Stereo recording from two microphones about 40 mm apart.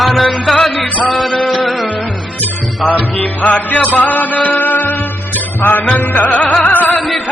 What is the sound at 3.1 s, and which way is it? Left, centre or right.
Music, left.